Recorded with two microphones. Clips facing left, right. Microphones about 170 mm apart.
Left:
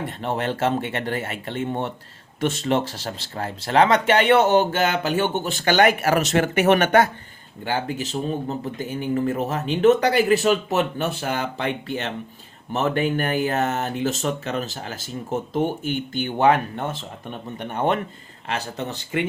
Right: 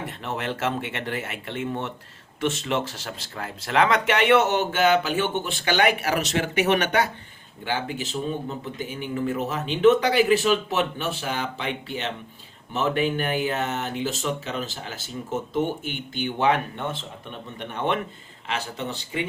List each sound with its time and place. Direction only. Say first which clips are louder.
0.2 s speech: left 5 dB; 35° left (ahead or behind)
8.4 s speech: left 4 dB; 40° left (ahead or behind)